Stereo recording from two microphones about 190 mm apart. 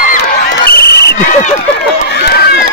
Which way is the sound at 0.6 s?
55° left (ahead or behind).